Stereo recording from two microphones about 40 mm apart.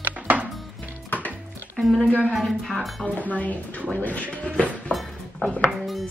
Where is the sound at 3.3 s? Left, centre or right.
Left.